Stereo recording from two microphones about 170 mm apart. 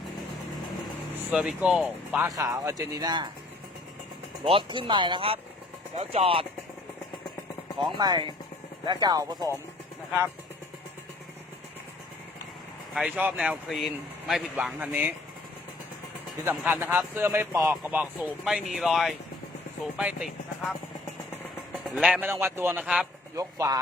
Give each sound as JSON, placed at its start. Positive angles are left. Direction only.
{"t": 1.3, "sound": "speech", "side_deg": -5}
{"t": 2.2, "sound": "speech", "side_deg": -15}
{"t": 4.4, "sound": "speech", "side_deg": -30}
{"t": 7.9, "sound": "speech", "side_deg": -25}
{"t": 12.9, "sound": "speech", "side_deg": -5}
{"t": 16.4, "sound": "speech", "side_deg": -10}
{"t": 21.9, "sound": "speech", "side_deg": -5}
{"t": 23.3, "sound": "speech", "side_deg": -20}